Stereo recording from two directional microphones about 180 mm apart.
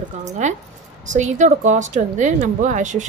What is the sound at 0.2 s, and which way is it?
Speech, 40° right (ahead or behind).